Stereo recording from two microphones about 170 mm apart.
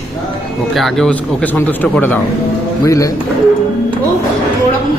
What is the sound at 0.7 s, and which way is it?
A man's voice, centre (ahead or behind).